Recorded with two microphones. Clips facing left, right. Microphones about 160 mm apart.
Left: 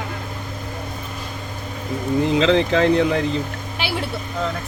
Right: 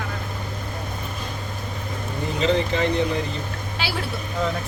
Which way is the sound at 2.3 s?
90° left.